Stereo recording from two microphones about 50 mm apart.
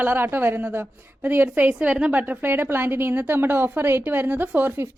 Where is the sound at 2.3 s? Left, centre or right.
Right.